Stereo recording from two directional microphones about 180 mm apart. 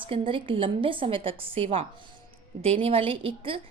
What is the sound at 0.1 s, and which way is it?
A woman's voice, 30° right (ahead or behind).